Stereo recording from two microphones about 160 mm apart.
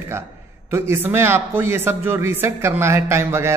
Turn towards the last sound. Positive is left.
turn(degrees=-15)  # may be behind; listen again after turning